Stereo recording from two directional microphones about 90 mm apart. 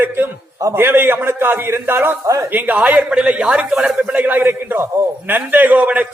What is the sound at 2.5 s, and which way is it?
A man's voice, 15° right (ahead or behind).